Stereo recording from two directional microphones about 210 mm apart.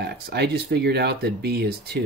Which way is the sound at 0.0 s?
50° right (ahead or behind).